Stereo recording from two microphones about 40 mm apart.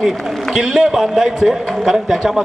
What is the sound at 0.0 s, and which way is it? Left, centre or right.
A man's voice, centre.